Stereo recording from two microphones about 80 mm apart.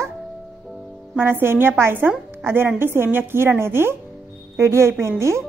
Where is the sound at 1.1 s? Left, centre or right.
Right.